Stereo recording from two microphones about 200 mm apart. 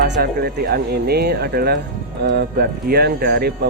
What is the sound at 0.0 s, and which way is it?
Speech, 50° right (ahead or behind).